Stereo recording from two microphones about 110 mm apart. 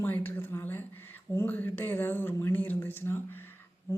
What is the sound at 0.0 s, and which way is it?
Speech, 20° left (ahead or behind).